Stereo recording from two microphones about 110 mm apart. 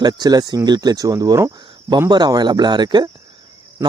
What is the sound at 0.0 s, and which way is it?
Speech, 40° right (ahead or behind).